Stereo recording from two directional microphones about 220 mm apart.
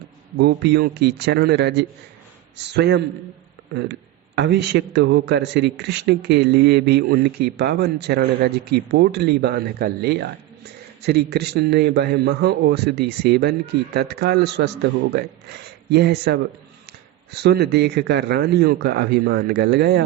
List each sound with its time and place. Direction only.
0.3 s a man's voice: 50° right (ahead or behind)
4.4 s a man's voice: 50° right (ahead or behind)